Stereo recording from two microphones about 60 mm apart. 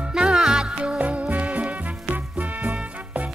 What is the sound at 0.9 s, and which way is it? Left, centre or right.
Music, right.